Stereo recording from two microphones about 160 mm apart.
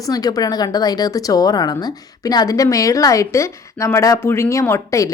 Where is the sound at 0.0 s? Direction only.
25° left (ahead or behind).